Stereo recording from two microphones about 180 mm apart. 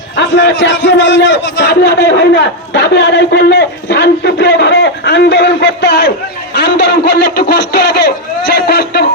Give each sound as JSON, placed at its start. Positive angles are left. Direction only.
{"t": 0.2, "sound": "a man's voice", "side_deg": 80}